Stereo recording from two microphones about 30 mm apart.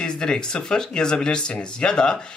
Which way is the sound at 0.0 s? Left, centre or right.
Left.